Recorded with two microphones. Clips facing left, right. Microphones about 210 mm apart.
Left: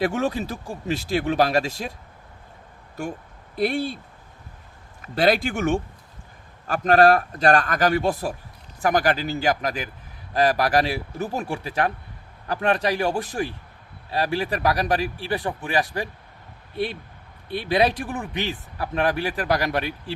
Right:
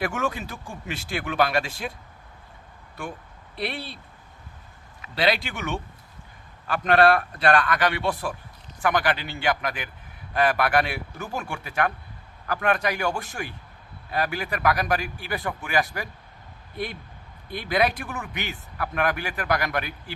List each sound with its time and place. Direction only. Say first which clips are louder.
0.0 s speech: left 4 dB; 35° left (ahead or behind)
3.0 s speech: left 5 dB; 45° left (ahead or behind)
5.0 s speech: left 5 dB; 45° left (ahead or behind); by 20.1 s 30° left (ahead or behind)